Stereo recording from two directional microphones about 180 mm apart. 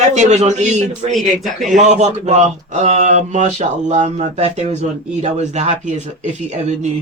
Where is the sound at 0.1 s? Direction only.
40° right (ahead or behind).